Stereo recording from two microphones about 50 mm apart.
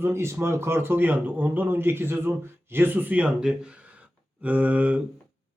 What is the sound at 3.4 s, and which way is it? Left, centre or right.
Speech, centre.